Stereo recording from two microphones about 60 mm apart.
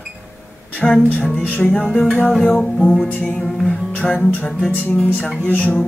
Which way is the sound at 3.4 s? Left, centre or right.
Centre.